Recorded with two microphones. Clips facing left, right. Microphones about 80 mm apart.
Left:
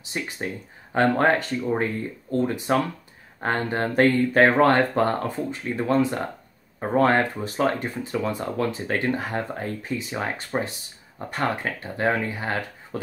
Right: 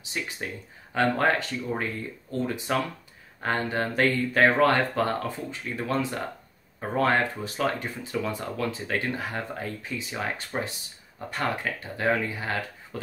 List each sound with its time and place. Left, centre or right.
0.2 s speech: left
2.3 s speech: left
10.5 s speech: centre
11.1 s speech: left